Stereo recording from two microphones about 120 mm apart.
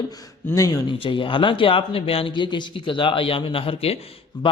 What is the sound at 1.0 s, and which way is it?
Speech, 45° left (ahead or behind).